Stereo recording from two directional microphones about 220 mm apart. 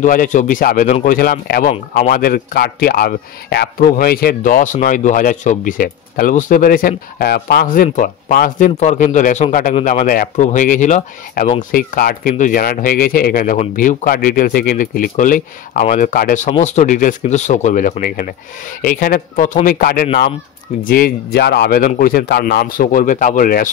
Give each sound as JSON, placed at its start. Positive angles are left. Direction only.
{"t": 0.0, "sound": "a man's voice", "side_deg": 35}